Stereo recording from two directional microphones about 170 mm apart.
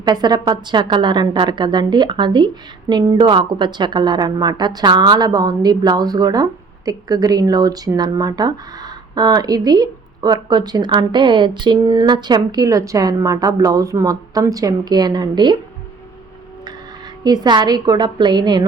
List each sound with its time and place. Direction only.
0.0 s a woman's voice: 25° right (ahead or behind)
17.2 s a woman's voice: 25° right (ahead or behind)